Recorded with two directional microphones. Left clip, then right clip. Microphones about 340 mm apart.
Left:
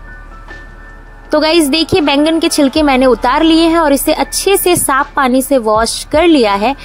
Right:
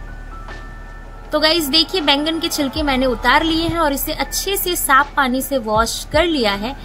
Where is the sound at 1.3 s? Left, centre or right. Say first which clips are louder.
Left 5 dB; left.